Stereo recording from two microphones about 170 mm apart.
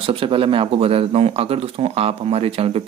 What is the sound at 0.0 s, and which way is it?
Speech, 35° right (ahead or behind).